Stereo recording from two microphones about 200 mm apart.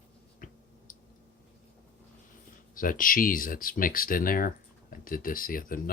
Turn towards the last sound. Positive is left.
turn(degrees=45)  # may be behind; listen again after turning